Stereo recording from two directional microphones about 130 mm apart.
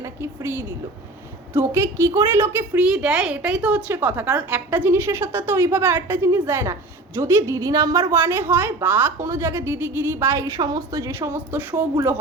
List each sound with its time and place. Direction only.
0.0 s a woman's voice: 20° right (ahead or behind)
2.7 s a woman's voice: 5° right (ahead or behind)